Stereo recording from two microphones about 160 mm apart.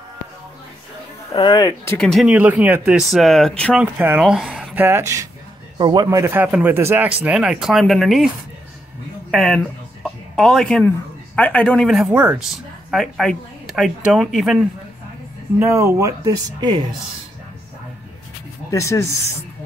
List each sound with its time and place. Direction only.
1.3 s speech: 30° left (ahead or behind)
2.0 s speech: 5° left (ahead or behind)
2.2 s speech: 10° right (ahead or behind)
3.7 s speech: 10° right (ahead or behind)
9.3 s speech: 5° left (ahead or behind)
10.0 s a sound: centre (ahead or behind)
11.3 s speech: 10° left (ahead or behind)
15.6 s speech: 20° right (ahead or behind)
18.7 s speech: 20° left (ahead or behind)